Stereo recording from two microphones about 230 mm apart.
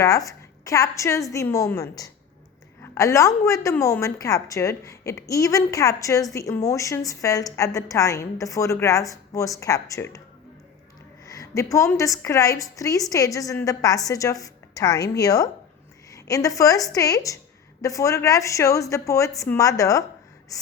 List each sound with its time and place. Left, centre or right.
0.0 s a woman's voice: centre
11.3 s a woman's voice: centre
20.5 s gasp: centre